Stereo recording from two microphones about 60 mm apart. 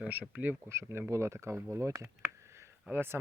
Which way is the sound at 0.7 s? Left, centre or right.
Right.